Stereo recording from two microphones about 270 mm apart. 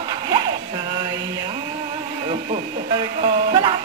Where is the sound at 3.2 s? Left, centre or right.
Centre.